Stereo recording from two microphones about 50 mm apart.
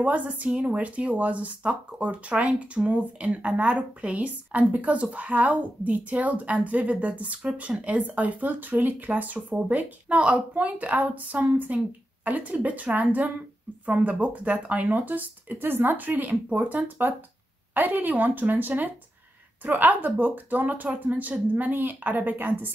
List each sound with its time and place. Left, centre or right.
0.0 s speech: right